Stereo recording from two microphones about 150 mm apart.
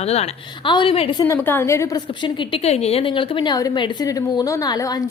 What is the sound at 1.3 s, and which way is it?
Speech, 15° left (ahead or behind).